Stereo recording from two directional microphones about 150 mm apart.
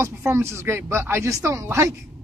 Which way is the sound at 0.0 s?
20° right (ahead or behind).